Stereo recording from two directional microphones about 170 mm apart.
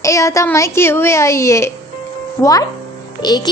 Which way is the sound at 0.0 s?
20° left (ahead or behind).